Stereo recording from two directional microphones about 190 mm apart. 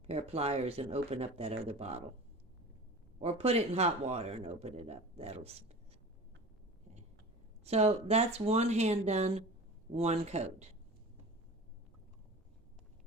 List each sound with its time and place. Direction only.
0.1 s speech: 30° right (ahead or behind)
3.2 s speech: 30° right (ahead or behind)
7.6 s speech: 35° right (ahead or behind)